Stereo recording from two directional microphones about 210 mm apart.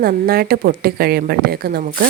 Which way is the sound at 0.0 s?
45° right (ahead or behind).